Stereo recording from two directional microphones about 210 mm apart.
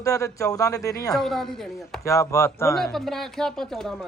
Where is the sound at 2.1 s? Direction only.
15° left (ahead or behind).